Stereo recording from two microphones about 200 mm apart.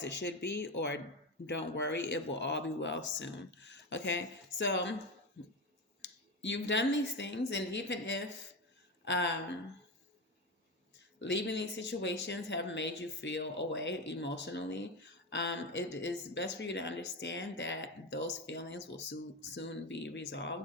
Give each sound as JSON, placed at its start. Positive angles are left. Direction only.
{"t": 0.0, "sound": "speech", "side_deg": 60}
{"t": 6.0, "sound": "speech", "side_deg": 65}
{"t": 11.2, "sound": "speech", "side_deg": 60}